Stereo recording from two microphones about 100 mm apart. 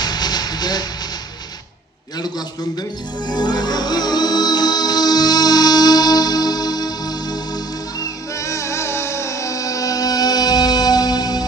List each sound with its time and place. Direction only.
0.0 s music: 45° left (ahead or behind)
3.3 s music: 45° left (ahead or behind)
8.0 s music: 30° left (ahead or behind)